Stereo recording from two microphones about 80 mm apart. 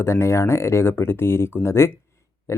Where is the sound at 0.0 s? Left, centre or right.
Left.